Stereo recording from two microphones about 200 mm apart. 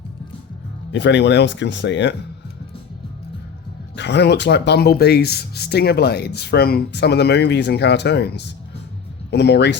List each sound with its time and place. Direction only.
0.9 s speech: 60° left (ahead or behind)
3.9 s speech: 60° left (ahead or behind)